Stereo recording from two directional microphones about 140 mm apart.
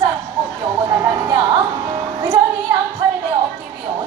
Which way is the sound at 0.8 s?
30° right (ahead or behind).